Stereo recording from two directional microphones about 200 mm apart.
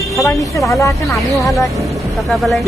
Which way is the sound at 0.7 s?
15° left (ahead or behind).